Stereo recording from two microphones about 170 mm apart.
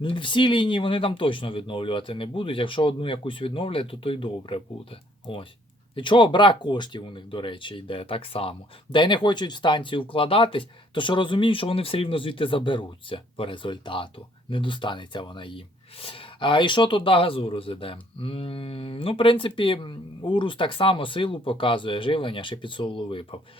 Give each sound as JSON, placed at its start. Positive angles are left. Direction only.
{"t": 0.0, "sound": "speech", "side_deg": 30}